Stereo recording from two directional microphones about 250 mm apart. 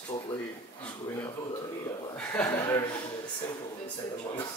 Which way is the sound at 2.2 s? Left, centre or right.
Centre.